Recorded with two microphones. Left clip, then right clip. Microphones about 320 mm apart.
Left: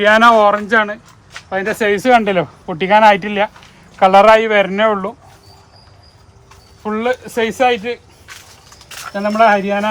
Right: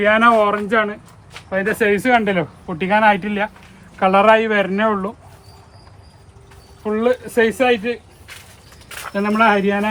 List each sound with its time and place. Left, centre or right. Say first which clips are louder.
0.0 s a man's voice: left 4 dB; centre
6.8 s a man's voice: even; left
9.1 s speech: left 3 dB; centre